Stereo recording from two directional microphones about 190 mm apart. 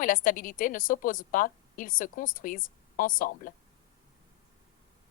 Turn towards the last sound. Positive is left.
turn(degrees=45)  # may be behind; listen again after turning